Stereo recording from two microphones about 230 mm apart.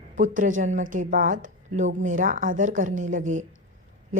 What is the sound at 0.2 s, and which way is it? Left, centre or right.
Speech, right.